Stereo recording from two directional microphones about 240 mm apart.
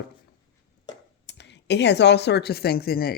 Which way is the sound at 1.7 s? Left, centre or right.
Left.